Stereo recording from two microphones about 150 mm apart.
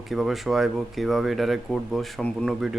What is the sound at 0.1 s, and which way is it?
Speech, centre (ahead or behind).